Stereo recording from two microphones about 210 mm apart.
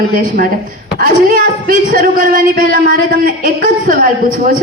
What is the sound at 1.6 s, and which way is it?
A woman's voice, 40° right (ahead or behind).